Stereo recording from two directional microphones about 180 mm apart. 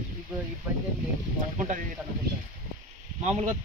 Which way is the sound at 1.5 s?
40° right (ahead or behind).